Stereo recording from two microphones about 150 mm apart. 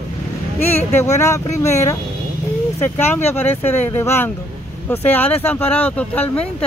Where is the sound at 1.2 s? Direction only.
20° left (ahead or behind).